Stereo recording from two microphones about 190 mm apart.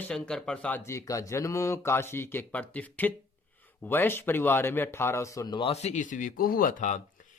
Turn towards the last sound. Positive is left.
turn(degrees=40)  # may be behind; listen again after turning